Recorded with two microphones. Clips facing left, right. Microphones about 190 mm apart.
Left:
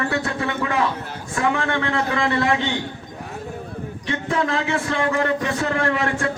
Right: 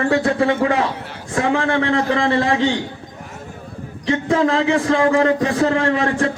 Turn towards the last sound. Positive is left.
turn(degrees=-30)  # may be behind; listen again after turning